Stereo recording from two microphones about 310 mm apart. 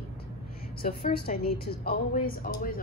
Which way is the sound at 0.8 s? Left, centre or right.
Left.